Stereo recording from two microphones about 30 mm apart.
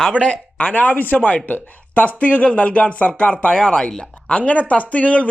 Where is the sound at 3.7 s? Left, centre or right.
Left.